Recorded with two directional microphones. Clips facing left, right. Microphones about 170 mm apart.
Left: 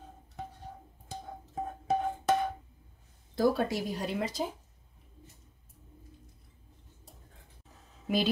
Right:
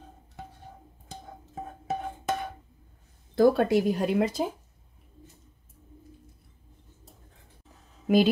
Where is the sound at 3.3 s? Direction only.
55° right (ahead or behind).